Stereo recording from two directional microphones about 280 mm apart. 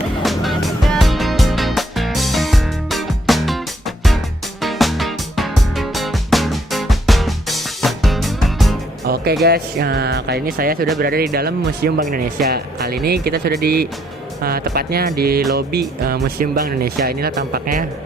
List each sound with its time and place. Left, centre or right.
0.2 s music: centre
9.0 s music: right
9.4 s speech: right